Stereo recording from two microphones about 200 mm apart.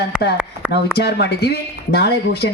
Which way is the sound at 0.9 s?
55° left (ahead or behind).